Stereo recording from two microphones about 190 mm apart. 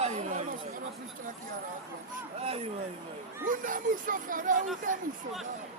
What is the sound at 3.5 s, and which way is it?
Speech, 45° right (ahead or behind).